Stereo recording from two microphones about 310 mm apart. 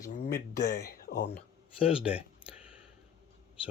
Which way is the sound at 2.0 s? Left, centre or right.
Centre.